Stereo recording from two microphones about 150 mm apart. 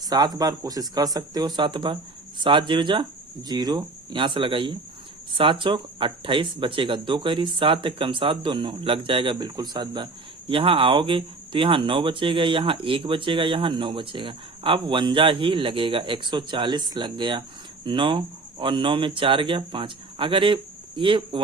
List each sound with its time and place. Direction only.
0.0 s speech: 25° right (ahead or behind)